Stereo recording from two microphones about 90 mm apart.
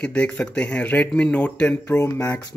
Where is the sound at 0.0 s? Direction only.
10° left (ahead or behind).